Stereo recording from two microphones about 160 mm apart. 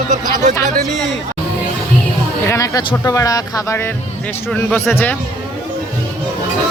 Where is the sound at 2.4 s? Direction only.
20° left (ahead or behind).